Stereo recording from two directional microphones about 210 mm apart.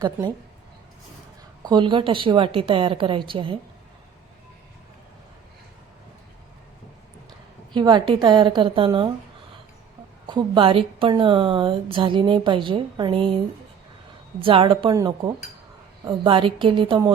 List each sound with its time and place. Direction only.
0.0 s a woman's voice: 20° right (ahead or behind)
1.6 s a woman's voice: 20° right (ahead or behind)
7.7 s a woman's voice: 20° right (ahead or behind)
10.2 s a woman's voice: 20° right (ahead or behind)
14.4 s a woman's voice: 25° right (ahead or behind)